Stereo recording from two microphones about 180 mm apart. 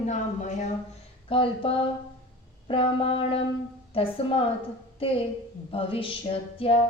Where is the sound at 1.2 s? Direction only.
30° left (ahead or behind).